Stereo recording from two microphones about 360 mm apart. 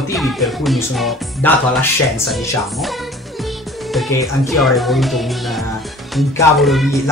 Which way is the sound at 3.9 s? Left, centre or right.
Centre.